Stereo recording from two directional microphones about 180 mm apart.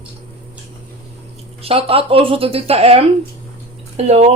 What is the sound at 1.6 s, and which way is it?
Speech, 30° right (ahead or behind).